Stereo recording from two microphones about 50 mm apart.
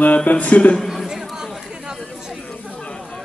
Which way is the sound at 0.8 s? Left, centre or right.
Centre.